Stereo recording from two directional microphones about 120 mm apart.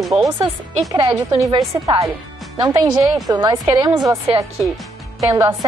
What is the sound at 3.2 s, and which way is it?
Speech, 35° right (ahead or behind).